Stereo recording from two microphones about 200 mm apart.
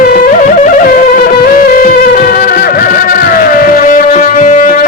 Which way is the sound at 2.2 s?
45° left (ahead or behind).